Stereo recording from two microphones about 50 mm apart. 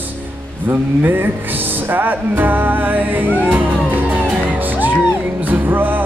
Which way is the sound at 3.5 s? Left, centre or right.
Right.